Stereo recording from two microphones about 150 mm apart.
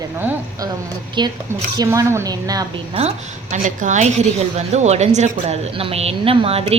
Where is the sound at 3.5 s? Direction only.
55° right (ahead or behind); by 6.8 s 40° right (ahead or behind).